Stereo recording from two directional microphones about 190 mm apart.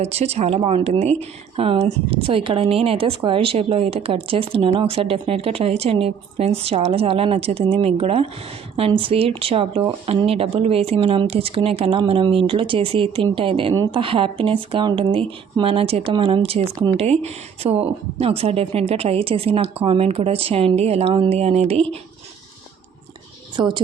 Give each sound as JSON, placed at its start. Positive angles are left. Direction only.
{"t": 0.0, "sound": "a woman's voice", "side_deg": -35}
{"t": 23.6, "sound": "speech", "side_deg": -25}